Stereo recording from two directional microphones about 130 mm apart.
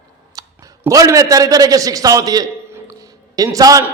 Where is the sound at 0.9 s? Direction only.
25° right (ahead or behind).